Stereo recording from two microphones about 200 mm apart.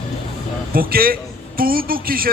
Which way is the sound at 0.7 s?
45° right (ahead or behind).